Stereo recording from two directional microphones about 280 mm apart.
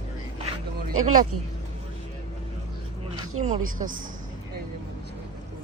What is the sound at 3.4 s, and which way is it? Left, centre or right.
Speech, right.